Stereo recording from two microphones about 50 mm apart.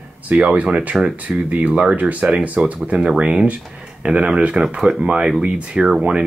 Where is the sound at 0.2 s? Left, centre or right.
Right.